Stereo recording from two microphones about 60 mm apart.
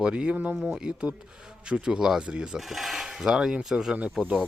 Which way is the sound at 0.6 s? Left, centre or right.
Centre.